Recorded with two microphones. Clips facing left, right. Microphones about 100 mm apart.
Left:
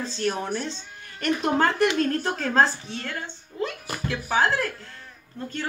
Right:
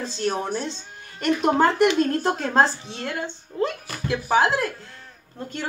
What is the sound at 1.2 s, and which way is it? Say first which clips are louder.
A woman's voice: right 3 dB; 15° right (ahead or behind).